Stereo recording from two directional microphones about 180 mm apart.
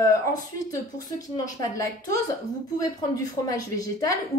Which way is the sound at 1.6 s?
20° left (ahead or behind).